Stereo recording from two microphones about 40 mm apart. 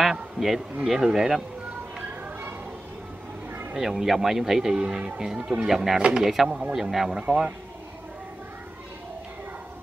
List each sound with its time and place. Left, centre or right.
0.0 s a sound: centre
0.8 s speech: centre
3.7 s speech: centre
4.7 s speech: right; by 7.4 s centre